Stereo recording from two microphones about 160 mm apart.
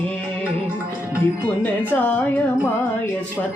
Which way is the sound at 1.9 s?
10° left (ahead or behind).